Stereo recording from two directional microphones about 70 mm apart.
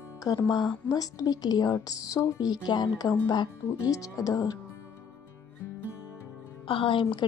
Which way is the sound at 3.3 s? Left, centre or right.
Left.